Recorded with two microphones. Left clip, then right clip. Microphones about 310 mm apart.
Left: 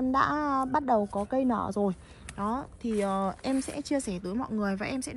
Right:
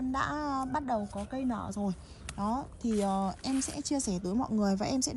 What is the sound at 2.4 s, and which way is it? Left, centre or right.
A woman's voice, centre.